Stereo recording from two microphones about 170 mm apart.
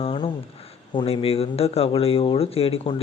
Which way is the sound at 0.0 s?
30° left (ahead or behind).